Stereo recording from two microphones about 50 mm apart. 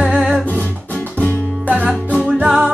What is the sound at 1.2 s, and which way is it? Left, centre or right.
Music, left.